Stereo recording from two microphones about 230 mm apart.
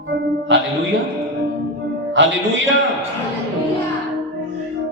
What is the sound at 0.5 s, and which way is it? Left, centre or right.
Speech, right.